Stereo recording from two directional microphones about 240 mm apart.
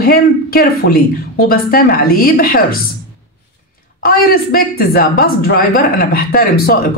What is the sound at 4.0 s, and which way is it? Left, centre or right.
A woman's voice, left.